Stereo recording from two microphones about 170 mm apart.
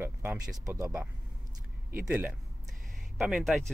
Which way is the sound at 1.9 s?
10° right (ahead or behind).